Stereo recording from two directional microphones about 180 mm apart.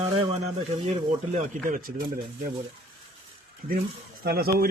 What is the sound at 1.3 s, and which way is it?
Speech, 45° right (ahead or behind).